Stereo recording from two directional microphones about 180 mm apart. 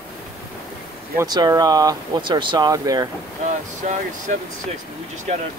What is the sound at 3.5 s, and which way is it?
Speech, 40° right (ahead or behind).